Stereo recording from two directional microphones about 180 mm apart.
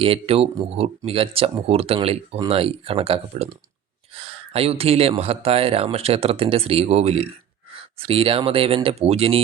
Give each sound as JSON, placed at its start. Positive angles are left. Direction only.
{"t": 0.0, "sound": "speech", "side_deg": -30}